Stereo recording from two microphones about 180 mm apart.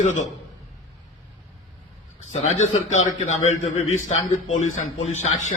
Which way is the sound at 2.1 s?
40° left (ahead or behind).